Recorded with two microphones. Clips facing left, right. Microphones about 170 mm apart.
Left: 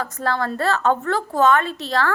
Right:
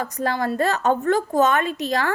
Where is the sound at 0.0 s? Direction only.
15° right (ahead or behind).